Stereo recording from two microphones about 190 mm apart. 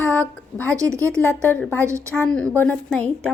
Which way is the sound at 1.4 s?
5° left (ahead or behind).